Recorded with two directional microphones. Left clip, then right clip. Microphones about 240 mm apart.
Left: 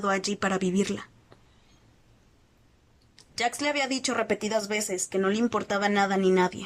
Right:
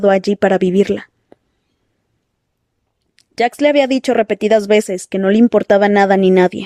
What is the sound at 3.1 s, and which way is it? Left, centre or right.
Speech, right.